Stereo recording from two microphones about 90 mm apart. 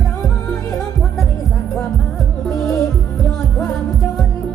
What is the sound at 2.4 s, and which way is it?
Music, centre (ahead or behind).